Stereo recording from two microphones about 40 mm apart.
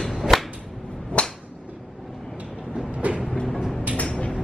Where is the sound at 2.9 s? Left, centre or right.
Right.